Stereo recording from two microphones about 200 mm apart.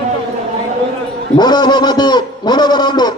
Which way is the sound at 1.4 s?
20° left (ahead or behind).